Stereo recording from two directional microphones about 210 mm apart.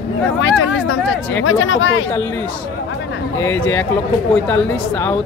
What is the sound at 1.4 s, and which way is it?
Speech, 70° left (ahead or behind).